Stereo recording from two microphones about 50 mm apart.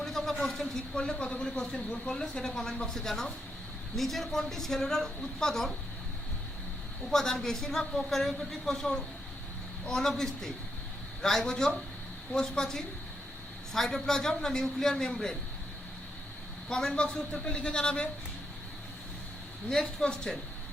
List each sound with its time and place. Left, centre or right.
0.0 s a sound: centre
0.9 s speech: centre
7.1 s speech: centre
16.6 s speech: centre
19.7 s speech: centre